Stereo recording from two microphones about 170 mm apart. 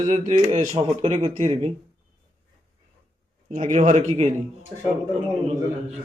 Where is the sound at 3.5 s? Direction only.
45° right (ahead or behind).